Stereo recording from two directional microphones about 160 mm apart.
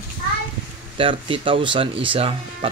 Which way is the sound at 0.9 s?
35° right (ahead or behind).